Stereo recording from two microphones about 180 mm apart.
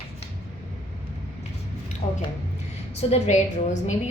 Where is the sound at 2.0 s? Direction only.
25° left (ahead or behind).